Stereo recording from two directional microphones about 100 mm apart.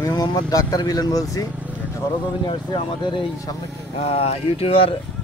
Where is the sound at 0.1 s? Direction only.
45° left (ahead or behind).